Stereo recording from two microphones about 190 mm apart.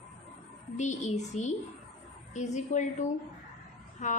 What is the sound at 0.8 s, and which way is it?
Speech, 40° left (ahead or behind).